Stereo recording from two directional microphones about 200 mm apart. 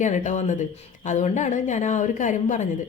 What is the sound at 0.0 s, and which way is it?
A woman's voice, 35° left (ahead or behind).